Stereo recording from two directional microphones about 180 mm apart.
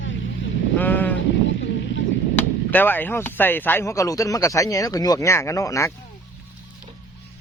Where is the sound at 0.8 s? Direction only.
10° left (ahead or behind).